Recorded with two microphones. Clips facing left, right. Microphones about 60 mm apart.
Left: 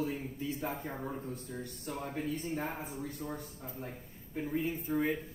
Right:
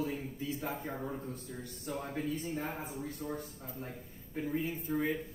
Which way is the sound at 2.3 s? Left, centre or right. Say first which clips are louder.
Left 1 dB; left.